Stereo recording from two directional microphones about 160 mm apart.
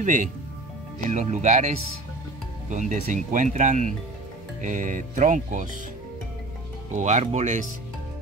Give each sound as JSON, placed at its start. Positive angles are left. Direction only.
{"t": 0.0, "sound": "speech", "side_deg": -55}
{"t": 2.7, "sound": "speech", "side_deg": -50}
{"t": 6.9, "sound": "speech", "side_deg": -50}